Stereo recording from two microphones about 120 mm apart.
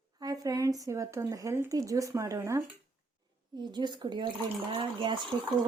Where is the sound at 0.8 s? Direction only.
25° right (ahead or behind).